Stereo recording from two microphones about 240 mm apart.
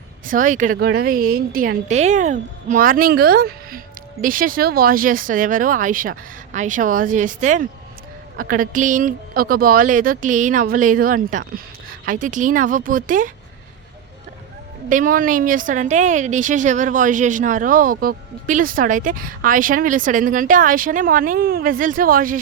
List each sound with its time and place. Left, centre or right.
0.3 s a woman's voice: right
14.8 s a woman's voice: right